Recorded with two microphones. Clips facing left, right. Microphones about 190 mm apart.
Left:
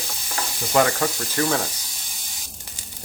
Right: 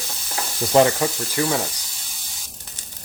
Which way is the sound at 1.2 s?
10° right (ahead or behind).